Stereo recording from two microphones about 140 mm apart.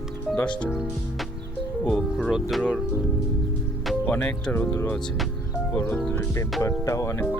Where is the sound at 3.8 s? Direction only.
10° left (ahead or behind).